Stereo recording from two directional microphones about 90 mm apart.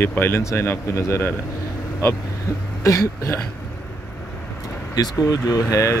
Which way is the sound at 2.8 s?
30° left (ahead or behind).